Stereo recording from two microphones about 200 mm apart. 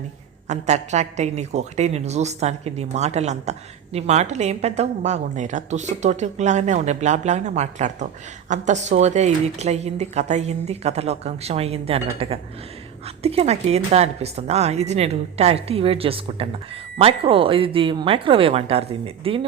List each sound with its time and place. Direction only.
0.4 s a woman's voice: 35° right (ahead or behind)